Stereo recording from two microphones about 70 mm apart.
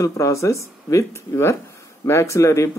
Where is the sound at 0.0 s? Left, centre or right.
Left.